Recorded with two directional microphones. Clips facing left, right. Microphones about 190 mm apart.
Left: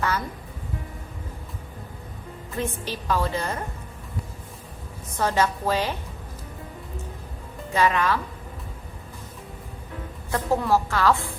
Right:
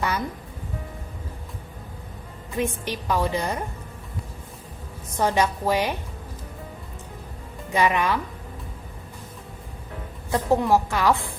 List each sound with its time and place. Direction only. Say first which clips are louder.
2.6 s a woman's voice: right 3 dB; 15° right (ahead or behind)
5.1 s a woman's voice: right 1 dB; 15° right (ahead or behind)
7.7 s a woman's voice: even; 15° right (ahead or behind)
10.3 s a woman's voice: right 2 dB; 15° right (ahead or behind)